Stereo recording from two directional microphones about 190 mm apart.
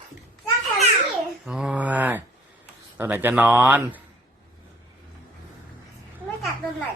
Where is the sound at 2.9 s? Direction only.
10° right (ahead or behind).